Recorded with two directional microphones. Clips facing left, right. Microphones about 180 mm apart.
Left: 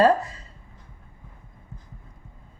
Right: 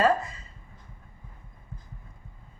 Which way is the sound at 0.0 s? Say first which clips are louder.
Left 5 dB; 35° left (ahead or behind).